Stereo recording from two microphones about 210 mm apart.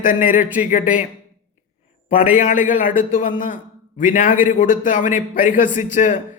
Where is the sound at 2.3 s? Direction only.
35° left (ahead or behind).